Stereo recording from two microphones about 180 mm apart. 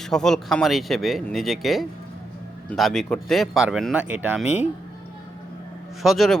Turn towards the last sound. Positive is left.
turn(degrees=0)  # may be behind; listen again after turning